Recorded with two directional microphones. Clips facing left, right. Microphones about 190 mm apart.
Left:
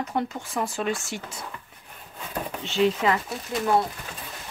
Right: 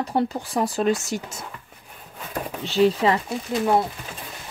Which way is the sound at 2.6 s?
35° right (ahead or behind).